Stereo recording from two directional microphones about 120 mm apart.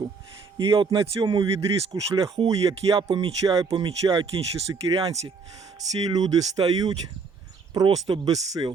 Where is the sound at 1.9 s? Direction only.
25° right (ahead or behind).